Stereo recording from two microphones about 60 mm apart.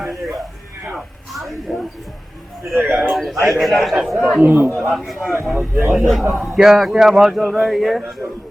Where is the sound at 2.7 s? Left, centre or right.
Right.